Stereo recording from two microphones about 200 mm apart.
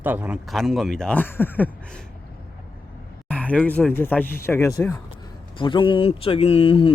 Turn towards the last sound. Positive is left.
turn(degrees=25)  # may be behind; listen again after turning